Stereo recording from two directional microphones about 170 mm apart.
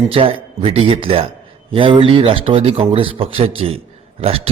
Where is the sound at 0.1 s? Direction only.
30° right (ahead or behind).